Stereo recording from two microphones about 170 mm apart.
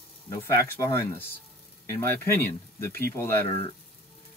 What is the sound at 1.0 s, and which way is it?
Speech, 15° left (ahead or behind).